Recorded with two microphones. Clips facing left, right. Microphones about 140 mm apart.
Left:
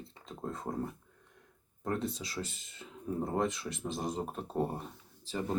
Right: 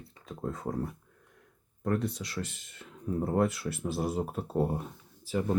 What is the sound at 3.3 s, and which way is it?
Speech, 5° right (ahead or behind).